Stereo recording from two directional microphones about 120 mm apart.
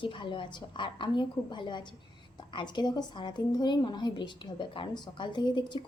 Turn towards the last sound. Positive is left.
turn(degrees=40)  # may be behind; listen again after turning